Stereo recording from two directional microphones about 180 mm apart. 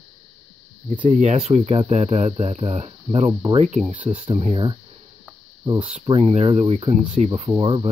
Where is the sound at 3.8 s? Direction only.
5° right (ahead or behind).